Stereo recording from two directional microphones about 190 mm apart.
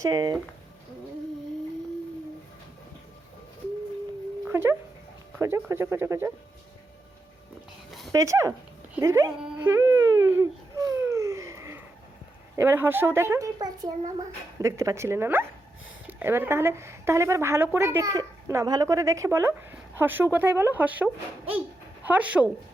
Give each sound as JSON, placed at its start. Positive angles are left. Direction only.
{"t": 0.0, "sound": "speech", "side_deg": -20}
{"t": 4.4, "sound": "dog", "side_deg": -10}
{"t": 5.4, "sound": "a woman's voice", "side_deg": -15}
{"t": 7.9, "sound": "a sound", "side_deg": 0}
{"t": 8.1, "sound": "a woman's voice", "side_deg": -15}
{"t": 9.0, "sound": "baby cry", "side_deg": -15}
{"t": 12.5, "sound": "a woman's voice", "side_deg": -10}